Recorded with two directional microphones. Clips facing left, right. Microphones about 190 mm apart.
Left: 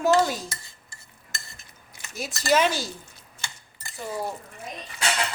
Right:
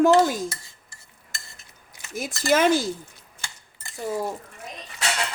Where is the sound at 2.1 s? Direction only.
50° right (ahead or behind).